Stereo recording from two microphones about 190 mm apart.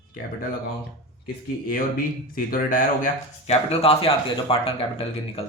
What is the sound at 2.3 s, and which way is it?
Speech, 45° left (ahead or behind).